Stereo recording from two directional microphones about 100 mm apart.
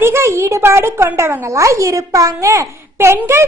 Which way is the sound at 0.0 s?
25° right (ahead or behind).